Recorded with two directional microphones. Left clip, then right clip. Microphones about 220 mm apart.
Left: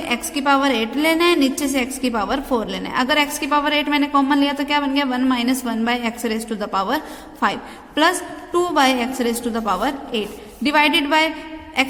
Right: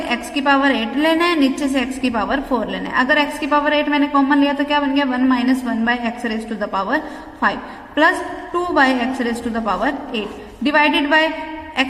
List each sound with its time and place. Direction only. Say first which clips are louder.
0.1 s a woman's voice: right 1 dB; 20° left (ahead or behind)